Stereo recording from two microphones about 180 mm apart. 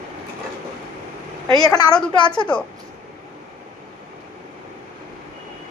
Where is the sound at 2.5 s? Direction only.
5° left (ahead or behind).